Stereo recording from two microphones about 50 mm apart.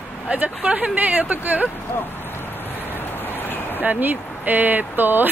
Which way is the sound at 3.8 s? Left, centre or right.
Right.